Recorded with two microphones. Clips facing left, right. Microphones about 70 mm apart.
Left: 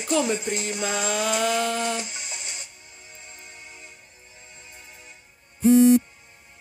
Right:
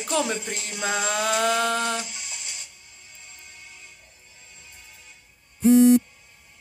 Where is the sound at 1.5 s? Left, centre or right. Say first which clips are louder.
Right 1 dB; right.